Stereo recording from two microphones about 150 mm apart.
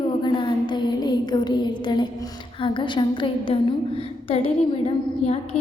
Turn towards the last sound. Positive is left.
turn(degrees=40)  # may be behind; listen again after turning